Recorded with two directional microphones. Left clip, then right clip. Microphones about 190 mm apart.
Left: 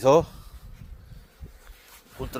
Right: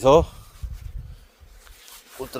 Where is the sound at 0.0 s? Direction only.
10° right (ahead or behind).